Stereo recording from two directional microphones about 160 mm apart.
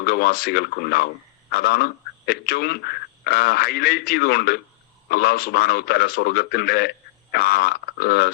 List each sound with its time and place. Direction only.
0.0 s a man's voice: 75° left (ahead or behind)